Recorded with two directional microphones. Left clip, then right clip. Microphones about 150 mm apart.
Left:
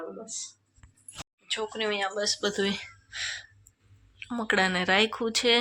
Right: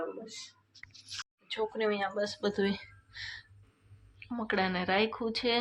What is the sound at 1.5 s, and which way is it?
Speech, 5° left (ahead or behind).